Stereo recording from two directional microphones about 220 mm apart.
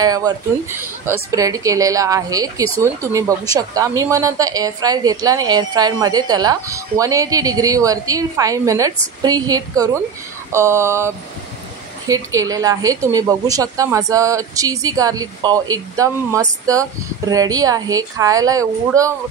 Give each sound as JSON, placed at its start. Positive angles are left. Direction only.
{"t": 0.0, "sound": "a woman's voice", "side_deg": -15}